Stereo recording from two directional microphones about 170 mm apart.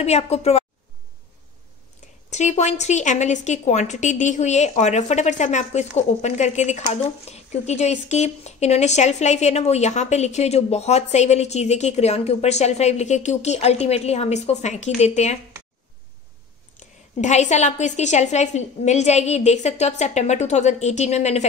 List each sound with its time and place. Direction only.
0.0 s speech: 40° left (ahead or behind)
2.3 s a woman's voice: 45° left (ahead or behind)
17.2 s speech: 45° left (ahead or behind)